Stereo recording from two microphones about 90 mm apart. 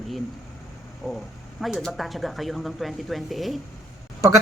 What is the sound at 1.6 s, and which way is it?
Speech, centre (ahead or behind).